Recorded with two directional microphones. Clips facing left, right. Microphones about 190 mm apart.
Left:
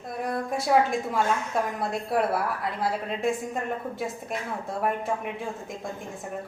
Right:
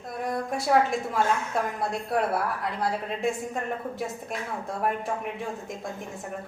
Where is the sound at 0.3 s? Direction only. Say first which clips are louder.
Even; centre (ahead or behind).